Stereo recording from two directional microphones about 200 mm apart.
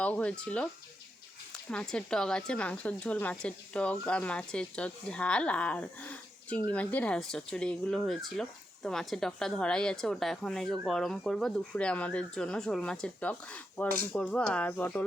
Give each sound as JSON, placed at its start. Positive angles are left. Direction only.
{"t": 0.0, "sound": "speech", "side_deg": 5}
{"t": 1.7, "sound": "speech", "side_deg": 5}
{"t": 13.8, "sound": "speech", "side_deg": -45}
{"t": 14.1, "sound": "speech", "side_deg": 5}